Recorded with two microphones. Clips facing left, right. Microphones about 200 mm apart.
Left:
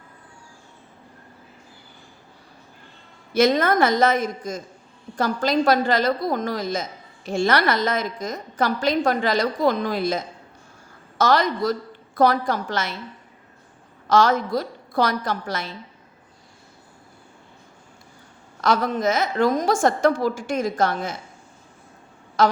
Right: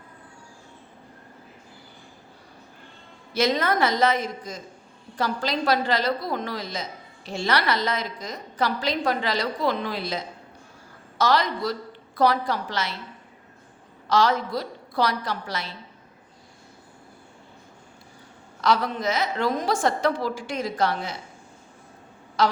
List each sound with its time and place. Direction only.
3.3 s a woman's voice: 50° left (ahead or behind)
14.1 s a woman's voice: 50° left (ahead or behind)
18.6 s a woman's voice: 45° left (ahead or behind)
22.4 s a sound: 50° left (ahead or behind)